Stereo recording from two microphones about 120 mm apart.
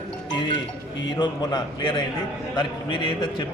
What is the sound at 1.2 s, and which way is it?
A man's voice, 40° left (ahead or behind).